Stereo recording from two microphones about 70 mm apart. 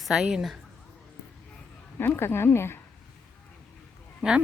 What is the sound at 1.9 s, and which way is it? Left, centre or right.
Speech, left.